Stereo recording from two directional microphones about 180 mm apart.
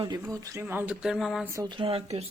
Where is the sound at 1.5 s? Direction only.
20° right (ahead or behind).